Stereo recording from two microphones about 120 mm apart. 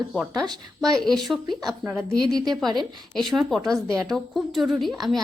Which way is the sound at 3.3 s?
Centre (ahead or behind).